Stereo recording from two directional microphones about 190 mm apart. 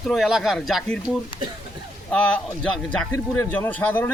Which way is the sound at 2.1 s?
5° left (ahead or behind).